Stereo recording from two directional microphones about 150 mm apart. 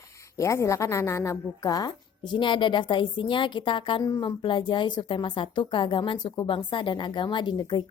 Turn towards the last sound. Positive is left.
turn(degrees=30)  # may be behind; listen again after turning